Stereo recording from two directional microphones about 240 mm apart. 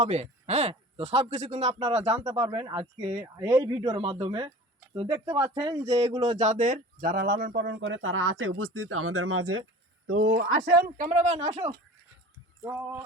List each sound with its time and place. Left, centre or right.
0.0 s speech: right
6.4 s speech: right
10.3 s speech: right